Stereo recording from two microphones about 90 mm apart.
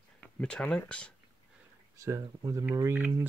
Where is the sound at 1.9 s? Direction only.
35° right (ahead or behind).